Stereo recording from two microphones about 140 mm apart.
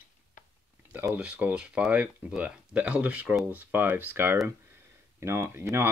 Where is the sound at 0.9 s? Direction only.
10° right (ahead or behind).